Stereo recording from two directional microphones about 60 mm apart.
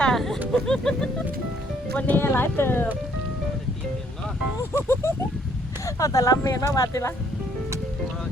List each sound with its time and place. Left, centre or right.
0.0 s a sound: centre
0.5 s speech: centre
2.0 s speech: left
2.2 s speech: left
4.8 s a sound: left
5.8 s speech: left